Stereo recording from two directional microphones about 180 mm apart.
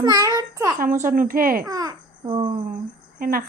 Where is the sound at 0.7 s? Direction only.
50° right (ahead or behind).